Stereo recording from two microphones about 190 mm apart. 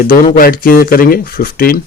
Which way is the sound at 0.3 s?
50° left (ahead or behind).